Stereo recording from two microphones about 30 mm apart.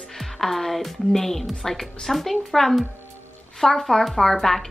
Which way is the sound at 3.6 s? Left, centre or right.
Centre.